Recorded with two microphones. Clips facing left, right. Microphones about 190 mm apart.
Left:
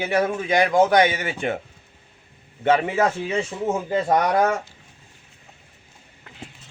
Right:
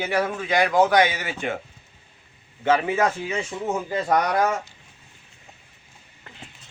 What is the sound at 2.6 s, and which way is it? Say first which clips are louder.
Speech: left 1 dB; 25° left (ahead or behind).